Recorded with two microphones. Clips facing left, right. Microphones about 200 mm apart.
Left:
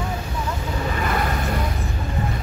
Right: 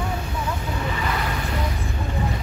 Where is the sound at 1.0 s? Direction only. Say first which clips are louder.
Left 6 dB; 50° left (ahead or behind).